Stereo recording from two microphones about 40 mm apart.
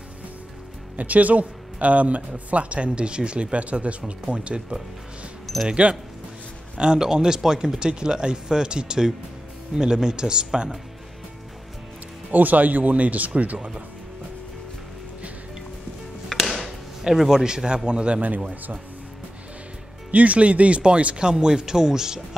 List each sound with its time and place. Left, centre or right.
0.9 s speech: right
6.8 s a man's voice: centre
12.3 s speech: right
16.3 s music: centre
17.0 s a man's voice: centre; by 18.2 s right
18.2 s speech: right
20.1 s speech: right
21.2 s a man's voice: centre